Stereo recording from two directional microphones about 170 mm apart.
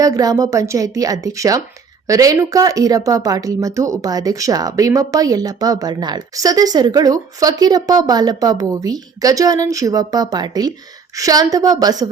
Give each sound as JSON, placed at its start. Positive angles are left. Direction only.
{"t": 0.0, "sound": "speech", "side_deg": -20}